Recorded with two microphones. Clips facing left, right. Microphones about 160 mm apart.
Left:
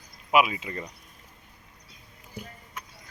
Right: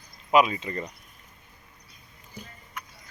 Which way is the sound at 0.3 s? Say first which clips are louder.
Right 2 dB; 10° left (ahead or behind).